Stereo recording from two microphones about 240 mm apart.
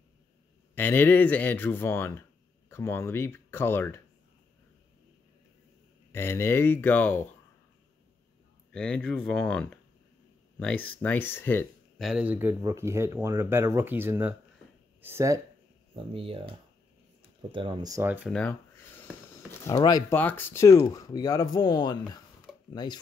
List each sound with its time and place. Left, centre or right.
0.7 s speech: centre
6.1 s speech: centre
8.7 s speech: centre
16.1 s speech: right
18.3 s speech: centre
19.6 s speech: centre